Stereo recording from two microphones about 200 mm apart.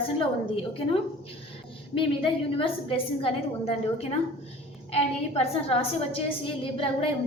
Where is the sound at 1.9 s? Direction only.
25° left (ahead or behind).